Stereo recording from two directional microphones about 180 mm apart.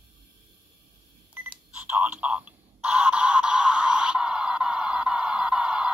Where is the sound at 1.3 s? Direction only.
10° right (ahead or behind).